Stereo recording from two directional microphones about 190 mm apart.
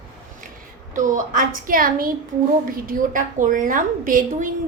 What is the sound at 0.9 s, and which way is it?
A woman's voice, 40° right (ahead or behind).